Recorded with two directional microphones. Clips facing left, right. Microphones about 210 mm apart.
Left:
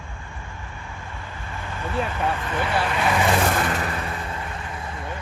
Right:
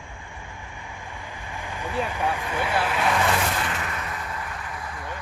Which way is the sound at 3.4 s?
50° left (ahead or behind).